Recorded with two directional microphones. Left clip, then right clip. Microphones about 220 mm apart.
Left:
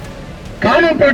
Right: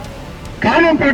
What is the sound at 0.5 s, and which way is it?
Speech, 50° left (ahead or behind).